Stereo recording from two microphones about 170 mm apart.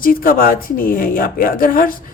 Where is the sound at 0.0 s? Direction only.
55° left (ahead or behind).